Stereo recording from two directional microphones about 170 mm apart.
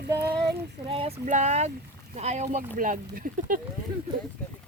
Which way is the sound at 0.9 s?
30° right (ahead or behind).